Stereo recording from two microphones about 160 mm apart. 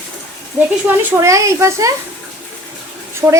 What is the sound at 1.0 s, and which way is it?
Speech, 20° right (ahead or behind).